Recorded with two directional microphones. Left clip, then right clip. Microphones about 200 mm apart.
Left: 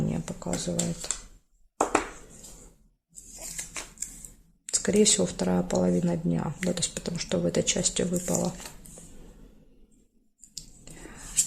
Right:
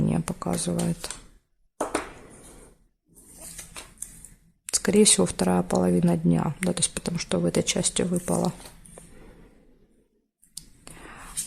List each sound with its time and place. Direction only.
0.1 s speech: 35° right (ahead or behind)
4.6 s speech: 25° right (ahead or behind)